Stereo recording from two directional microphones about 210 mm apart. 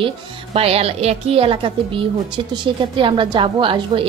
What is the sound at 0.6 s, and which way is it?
A woman's voice, 30° right (ahead or behind).